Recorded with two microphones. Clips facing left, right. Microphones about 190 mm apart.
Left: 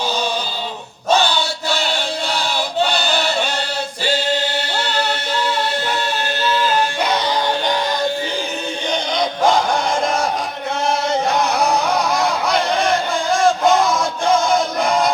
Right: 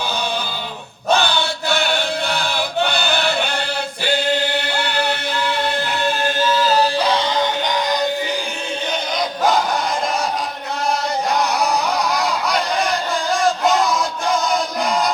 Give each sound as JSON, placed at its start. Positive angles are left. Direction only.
{"t": 1.1, "sound": "chant", "side_deg": -60}
{"t": 2.8, "sound": "a sound", "side_deg": -55}
{"t": 7.0, "sound": "music", "side_deg": -30}